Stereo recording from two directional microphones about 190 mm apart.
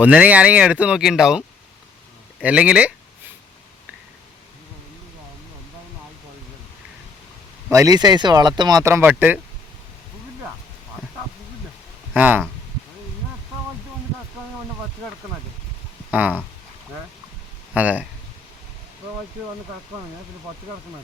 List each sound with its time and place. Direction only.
0.0 s speech: 10° right (ahead or behind)
7.7 s speech: 15° right (ahead or behind)
12.1 s speech: 10° right (ahead or behind)
17.7 s speech: 10° right (ahead or behind)